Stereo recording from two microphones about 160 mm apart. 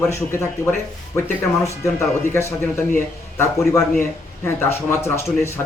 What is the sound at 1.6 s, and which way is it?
Speech, 15° left (ahead or behind).